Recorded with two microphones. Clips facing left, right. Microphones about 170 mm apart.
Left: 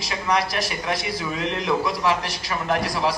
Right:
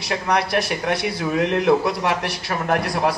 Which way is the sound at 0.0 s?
60° right (ahead or behind).